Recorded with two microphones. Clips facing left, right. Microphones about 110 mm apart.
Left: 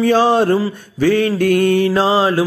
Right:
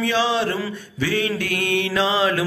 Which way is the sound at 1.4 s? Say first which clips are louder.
Left 10 dB; 45° left (ahead or behind).